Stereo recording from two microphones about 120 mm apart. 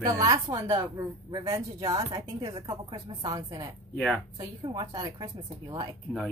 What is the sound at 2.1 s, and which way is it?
A woman's voice, 45° right (ahead or behind).